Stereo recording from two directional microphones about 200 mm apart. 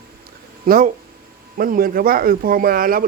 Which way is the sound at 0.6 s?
45° right (ahead or behind).